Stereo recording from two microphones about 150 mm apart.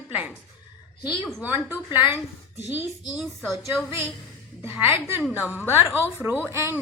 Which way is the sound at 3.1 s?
Centre (ahead or behind).